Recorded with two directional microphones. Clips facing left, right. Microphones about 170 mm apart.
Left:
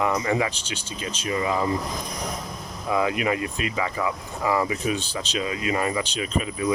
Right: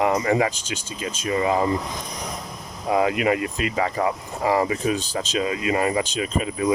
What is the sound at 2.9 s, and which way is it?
Speech, 35° right (ahead or behind).